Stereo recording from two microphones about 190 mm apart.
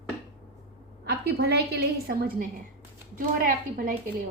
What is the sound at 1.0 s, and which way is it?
A woman's voice, 60° right (ahead or behind).